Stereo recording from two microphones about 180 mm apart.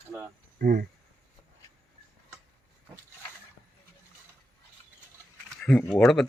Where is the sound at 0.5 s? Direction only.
55° right (ahead or behind).